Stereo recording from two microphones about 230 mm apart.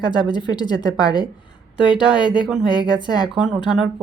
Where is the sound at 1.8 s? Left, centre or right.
Left.